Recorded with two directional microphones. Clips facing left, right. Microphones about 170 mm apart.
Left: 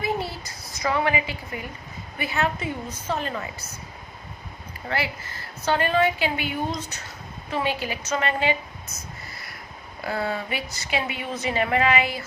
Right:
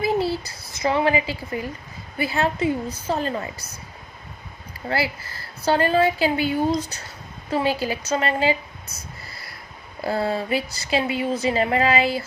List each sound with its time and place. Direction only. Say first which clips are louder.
0.0 s a sound: right 6 dB; 30° right (ahead or behind)
2.1 s a woman's voice: right 3 dB; 30° right (ahead or behind)
4.9 s a woman's voice: right 4 dB; 35° right (ahead or behind)